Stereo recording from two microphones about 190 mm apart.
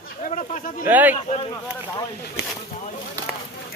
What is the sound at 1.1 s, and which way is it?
Speech, 35° left (ahead or behind).